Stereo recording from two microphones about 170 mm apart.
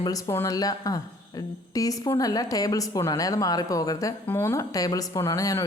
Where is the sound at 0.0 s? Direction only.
15° left (ahead or behind).